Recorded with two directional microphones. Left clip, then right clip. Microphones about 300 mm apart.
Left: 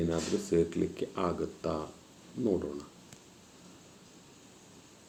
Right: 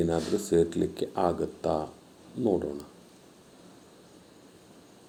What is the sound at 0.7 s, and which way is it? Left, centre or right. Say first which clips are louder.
Speech: right 4 dB; right.